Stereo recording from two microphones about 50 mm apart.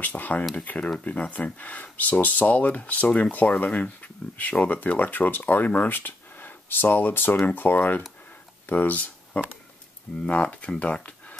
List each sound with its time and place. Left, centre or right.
0.0 s speech: left